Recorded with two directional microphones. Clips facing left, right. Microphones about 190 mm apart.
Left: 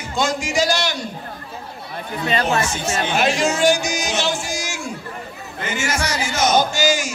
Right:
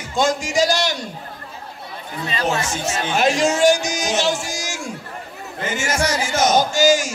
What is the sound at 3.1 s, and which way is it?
A man's voice, 40° right (ahead or behind).